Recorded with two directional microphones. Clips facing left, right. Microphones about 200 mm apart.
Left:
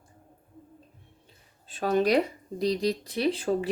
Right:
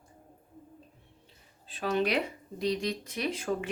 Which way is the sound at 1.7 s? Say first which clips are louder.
Left 5 dB; 45° left (ahead or behind).